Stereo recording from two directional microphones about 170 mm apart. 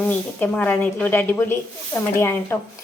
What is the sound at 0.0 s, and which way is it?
A woman's voice, 10° left (ahead or behind).